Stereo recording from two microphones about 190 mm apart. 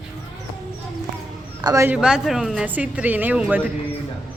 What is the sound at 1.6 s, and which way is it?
Speech, 15° right (ahead or behind).